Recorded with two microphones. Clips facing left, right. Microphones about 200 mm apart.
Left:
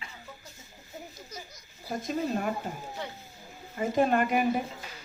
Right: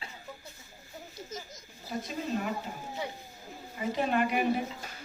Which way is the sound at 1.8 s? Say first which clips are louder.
Left 4 dB; 45° left (ahead or behind).